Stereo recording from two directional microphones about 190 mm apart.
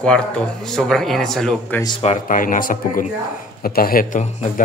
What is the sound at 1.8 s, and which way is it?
Speech, 35° left (ahead or behind).